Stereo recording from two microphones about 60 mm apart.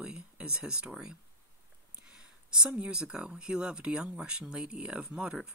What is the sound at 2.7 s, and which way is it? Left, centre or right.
Speech, centre.